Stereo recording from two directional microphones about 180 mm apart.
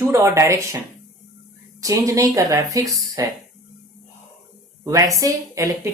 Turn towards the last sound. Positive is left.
turn(degrees=-20)  # may be behind; listen again after turning